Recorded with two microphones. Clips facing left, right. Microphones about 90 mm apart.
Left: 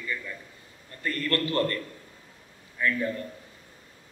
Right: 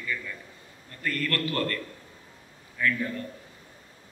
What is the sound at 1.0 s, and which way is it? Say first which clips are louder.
Mantra: left 1 dB; 30° left (ahead or behind).